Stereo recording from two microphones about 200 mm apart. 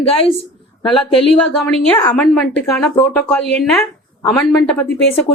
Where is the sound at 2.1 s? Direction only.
5° left (ahead or behind).